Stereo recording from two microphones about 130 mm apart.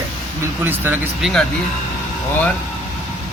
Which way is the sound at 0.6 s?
15° right (ahead or behind).